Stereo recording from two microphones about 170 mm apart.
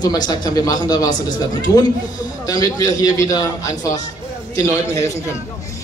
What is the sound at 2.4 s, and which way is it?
A man's voice, 20° left (ahead or behind).